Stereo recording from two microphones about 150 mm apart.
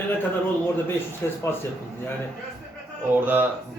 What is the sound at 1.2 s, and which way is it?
Speech, 15° left (ahead or behind).